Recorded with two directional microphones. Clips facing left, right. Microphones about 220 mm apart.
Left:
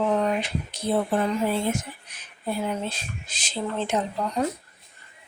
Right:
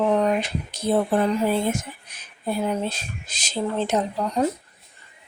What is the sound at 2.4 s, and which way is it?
Speech, 40° right (ahead or behind).